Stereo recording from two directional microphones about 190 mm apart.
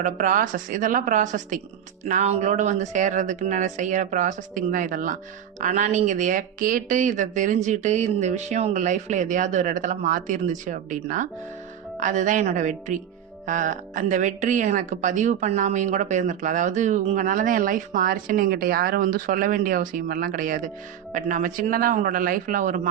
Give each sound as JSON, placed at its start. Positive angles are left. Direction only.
{"t": 0.0, "sound": "speech", "side_deg": -45}